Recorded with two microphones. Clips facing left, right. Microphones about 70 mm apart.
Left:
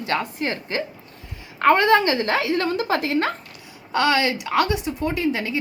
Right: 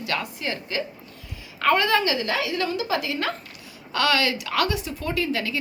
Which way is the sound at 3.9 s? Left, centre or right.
Left.